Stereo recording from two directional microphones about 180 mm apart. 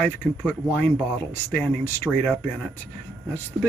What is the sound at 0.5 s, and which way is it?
Speech, 10° left (ahead or behind).